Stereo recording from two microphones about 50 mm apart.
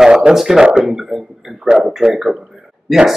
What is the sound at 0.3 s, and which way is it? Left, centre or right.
Speech, centre.